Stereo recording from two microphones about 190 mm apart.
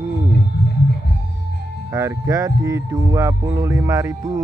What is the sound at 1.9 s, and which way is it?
Speech, 15° right (ahead or behind).